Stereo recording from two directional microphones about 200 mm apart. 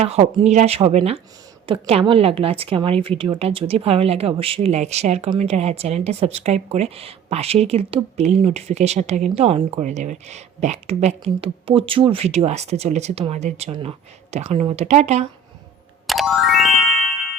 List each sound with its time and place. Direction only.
0.0 s a woman's voice: 30° right (ahead or behind)
16.0 s music: centre (ahead or behind)